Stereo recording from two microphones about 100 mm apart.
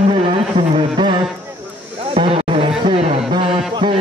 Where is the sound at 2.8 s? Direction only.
80° right.